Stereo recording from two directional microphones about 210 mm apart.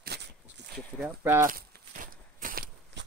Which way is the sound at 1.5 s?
40° right (ahead or behind).